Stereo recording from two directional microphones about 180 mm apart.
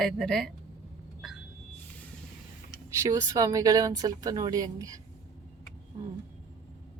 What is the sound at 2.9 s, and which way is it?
Speech, 15° right (ahead or behind).